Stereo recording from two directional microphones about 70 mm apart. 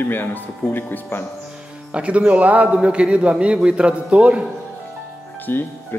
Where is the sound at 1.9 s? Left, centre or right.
Centre.